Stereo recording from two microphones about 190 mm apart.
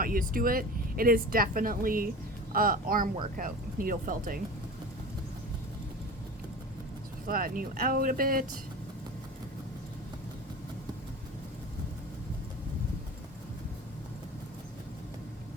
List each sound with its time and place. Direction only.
0.0 s speech: 45° right (ahead or behind)
7.3 s speech: 50° right (ahead or behind)